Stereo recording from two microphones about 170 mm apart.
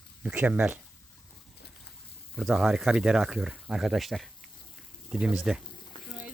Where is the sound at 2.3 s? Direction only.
Centre (ahead or behind).